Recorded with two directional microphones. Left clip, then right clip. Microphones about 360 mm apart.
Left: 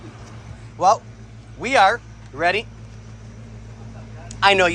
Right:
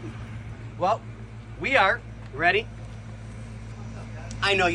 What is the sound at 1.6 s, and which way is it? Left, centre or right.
Speech, centre.